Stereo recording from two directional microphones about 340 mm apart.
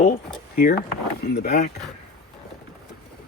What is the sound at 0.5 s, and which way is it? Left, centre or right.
Speech, left.